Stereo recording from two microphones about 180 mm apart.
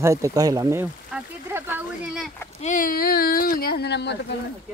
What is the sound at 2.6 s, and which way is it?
Speech, 45° left (ahead or behind).